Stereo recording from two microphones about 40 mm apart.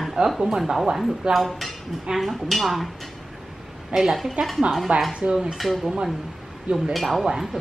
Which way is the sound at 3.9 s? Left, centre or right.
Right.